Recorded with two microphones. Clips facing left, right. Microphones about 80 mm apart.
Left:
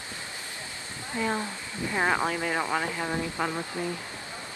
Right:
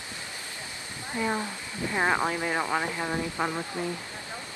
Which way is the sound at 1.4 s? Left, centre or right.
Left.